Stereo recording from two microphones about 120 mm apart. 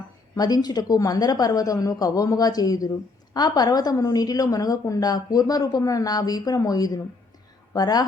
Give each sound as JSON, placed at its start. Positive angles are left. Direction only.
{"t": 0.3, "sound": "a woman's voice", "side_deg": 35}